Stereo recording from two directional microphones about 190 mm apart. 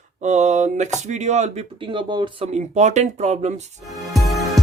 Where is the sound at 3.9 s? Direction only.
Centre (ahead or behind).